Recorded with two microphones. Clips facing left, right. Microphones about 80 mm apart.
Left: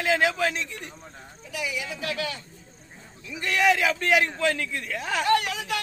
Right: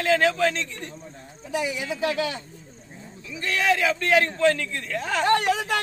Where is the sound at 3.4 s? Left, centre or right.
Centre.